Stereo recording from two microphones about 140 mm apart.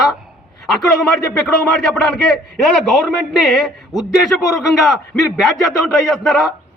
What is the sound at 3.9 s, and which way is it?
Speech, 25° left (ahead or behind).